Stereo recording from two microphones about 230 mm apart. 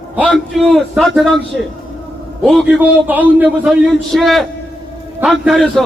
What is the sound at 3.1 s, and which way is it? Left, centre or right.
A man's voice, centre.